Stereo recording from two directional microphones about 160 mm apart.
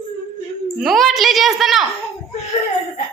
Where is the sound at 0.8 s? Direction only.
Centre (ahead or behind).